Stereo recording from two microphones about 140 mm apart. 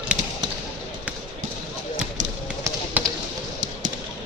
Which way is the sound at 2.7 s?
20° right (ahead or behind).